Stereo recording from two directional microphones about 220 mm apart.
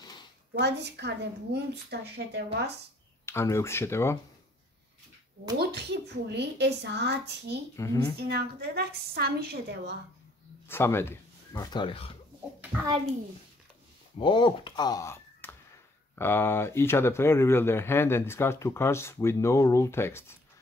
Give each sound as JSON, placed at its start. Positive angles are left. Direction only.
{"t": 0.6, "sound": "a woman's voice", "side_deg": -50}
{"t": 3.3, "sound": "speech", "side_deg": 10}
{"t": 5.6, "sound": "a woman's voice", "side_deg": -50}
{"t": 7.7, "sound": "speech", "side_deg": 15}
{"t": 8.2, "sound": "a woman's voice", "side_deg": -45}
{"t": 10.7, "sound": "speech", "side_deg": 10}
{"t": 14.1, "sound": "speech", "side_deg": 20}